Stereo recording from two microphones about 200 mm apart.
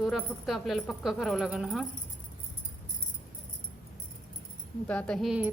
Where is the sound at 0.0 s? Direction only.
Centre (ahead or behind).